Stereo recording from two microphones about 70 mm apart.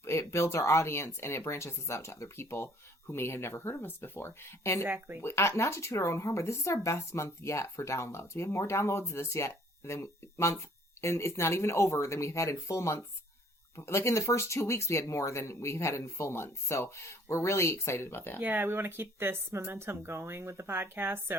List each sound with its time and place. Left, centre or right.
0.0 s speech: left
4.9 s speech: right
5.2 s speech: left
18.3 s speech: right